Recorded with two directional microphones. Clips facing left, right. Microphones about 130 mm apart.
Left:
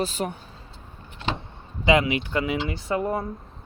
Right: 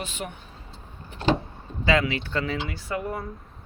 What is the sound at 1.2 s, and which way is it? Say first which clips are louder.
Vehicle: right 6 dB; 40° right (ahead or behind).